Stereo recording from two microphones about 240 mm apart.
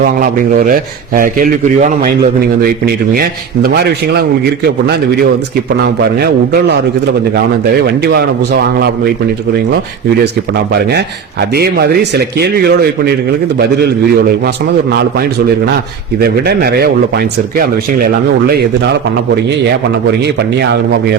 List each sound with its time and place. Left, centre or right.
0.0 s speech: right
10.8 s speech: right